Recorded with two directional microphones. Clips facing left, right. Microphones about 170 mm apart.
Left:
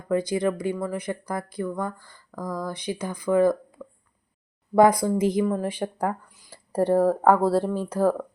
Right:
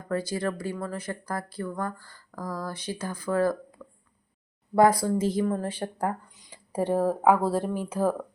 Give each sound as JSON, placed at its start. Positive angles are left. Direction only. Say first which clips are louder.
{"t": 0.1, "sound": "speech", "louder": "left 5 dB", "side_deg": 15}
{"t": 3.8, "sound": "a sound", "louder": "left 5 dB", "side_deg": -5}
{"t": 4.8, "sound": "speech", "louder": "left 3 dB", "side_deg": 15}
{"t": 6.5, "sound": "speech", "louder": "left 5 dB", "side_deg": -10}